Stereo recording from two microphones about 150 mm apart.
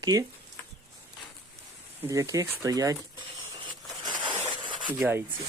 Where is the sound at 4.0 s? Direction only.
30° right (ahead or behind).